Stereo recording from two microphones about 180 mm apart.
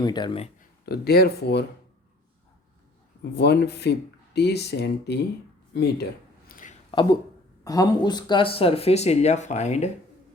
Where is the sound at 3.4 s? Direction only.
65° left (ahead or behind).